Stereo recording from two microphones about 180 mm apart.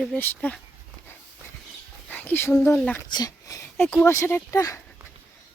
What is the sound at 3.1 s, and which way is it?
Speech, 20° left (ahead or behind).